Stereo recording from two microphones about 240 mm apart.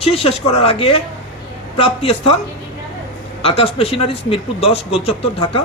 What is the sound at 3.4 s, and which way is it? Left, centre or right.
Speech, left.